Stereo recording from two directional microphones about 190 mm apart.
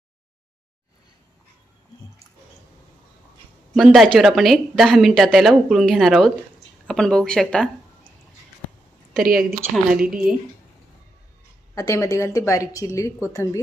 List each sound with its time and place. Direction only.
3.8 s speech: centre (ahead or behind)
9.2 s speech: 50° right (ahead or behind)
9.6 s speech: 10° right (ahead or behind)
11.7 s a woman's voice: 15° left (ahead or behind)